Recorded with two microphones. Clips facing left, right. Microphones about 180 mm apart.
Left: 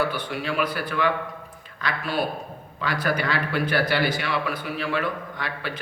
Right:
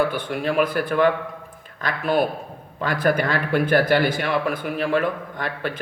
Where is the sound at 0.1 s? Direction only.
50° right (ahead or behind).